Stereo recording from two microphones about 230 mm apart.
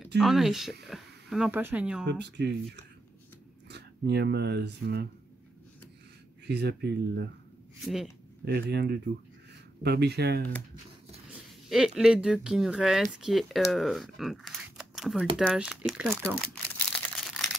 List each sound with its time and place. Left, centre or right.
0.2 s speech: centre
2.0 s speech: right
6.4 s speech: right
7.8 s speech: centre
8.5 s speech: right
11.7 s speech: centre